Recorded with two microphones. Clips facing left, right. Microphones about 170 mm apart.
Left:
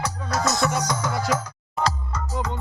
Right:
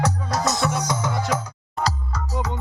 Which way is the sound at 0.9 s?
20° right (ahead or behind).